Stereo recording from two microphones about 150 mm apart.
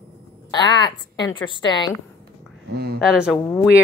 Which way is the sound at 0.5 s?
30° left (ahead or behind).